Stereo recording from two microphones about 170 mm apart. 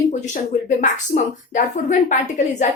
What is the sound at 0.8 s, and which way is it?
A woman's voice, 50° left (ahead or behind).